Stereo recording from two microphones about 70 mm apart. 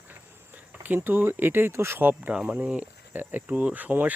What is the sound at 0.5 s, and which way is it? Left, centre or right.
Cricket, right.